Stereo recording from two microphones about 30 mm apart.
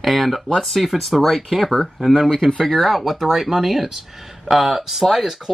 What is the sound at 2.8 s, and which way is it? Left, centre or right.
Speech, centre.